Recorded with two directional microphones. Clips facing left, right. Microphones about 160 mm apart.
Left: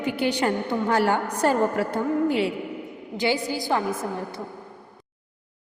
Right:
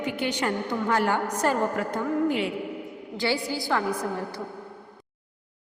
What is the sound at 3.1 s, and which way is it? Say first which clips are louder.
A woman's voice: left 3 dB; 20° left (ahead or behind).